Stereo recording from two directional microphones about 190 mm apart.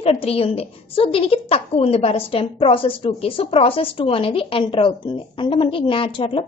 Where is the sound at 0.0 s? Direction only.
30° left (ahead or behind).